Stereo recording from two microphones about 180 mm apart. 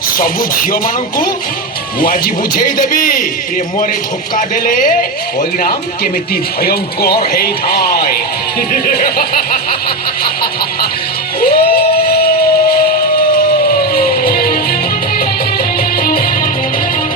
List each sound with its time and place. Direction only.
0.2 s speech: 50° left (ahead or behind)
2.0 s speech: 55° left (ahead or behind)
4.4 s speech: 50° left (ahead or behind)
11.4 s music: 55° left (ahead or behind)
13.9 s music: 55° left (ahead or behind)